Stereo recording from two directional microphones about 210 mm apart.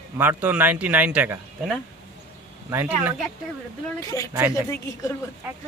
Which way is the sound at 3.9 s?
15° left (ahead or behind).